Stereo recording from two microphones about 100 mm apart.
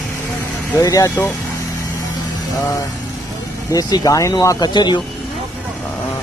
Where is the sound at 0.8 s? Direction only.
35° left (ahead or behind).